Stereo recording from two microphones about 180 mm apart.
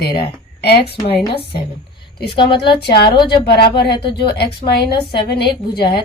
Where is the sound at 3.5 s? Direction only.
65° left (ahead or behind).